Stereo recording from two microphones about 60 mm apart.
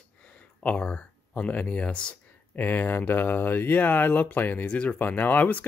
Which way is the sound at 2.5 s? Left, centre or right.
Left.